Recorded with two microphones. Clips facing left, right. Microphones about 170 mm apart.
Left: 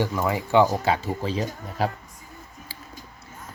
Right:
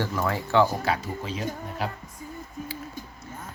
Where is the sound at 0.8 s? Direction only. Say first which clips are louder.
Left 4 dB; 30° left (ahead or behind).